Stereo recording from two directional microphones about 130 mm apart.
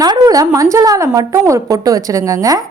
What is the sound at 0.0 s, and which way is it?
A woman's voice, 30° right (ahead or behind).